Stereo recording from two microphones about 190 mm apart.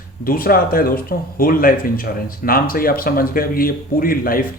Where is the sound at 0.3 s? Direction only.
50° left (ahead or behind).